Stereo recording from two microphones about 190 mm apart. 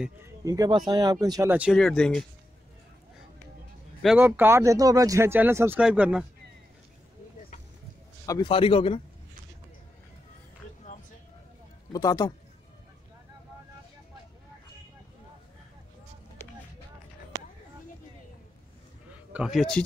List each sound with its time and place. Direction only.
0.0 s speech: 15° right (ahead or behind); by 2.2 s 5° left (ahead or behind)
4.0 s speech: 5° right (ahead or behind)
8.5 s a man's voice: 30° left (ahead or behind)
11.9 s a man's voice: 20° left (ahead or behind)
19.3 s speech: centre (ahead or behind)